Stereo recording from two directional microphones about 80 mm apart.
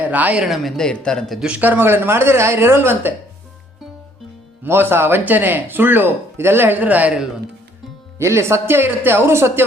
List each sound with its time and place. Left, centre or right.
0.1 s speech: centre
0.4 s speech: centre
1.4 s speech: centre
4.6 s speech: right
8.2 s speech: right